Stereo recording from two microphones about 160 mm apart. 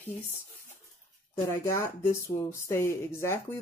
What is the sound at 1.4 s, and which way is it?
Speech, 15° left (ahead or behind).